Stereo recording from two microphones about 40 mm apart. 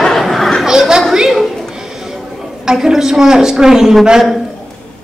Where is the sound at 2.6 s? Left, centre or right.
Centre.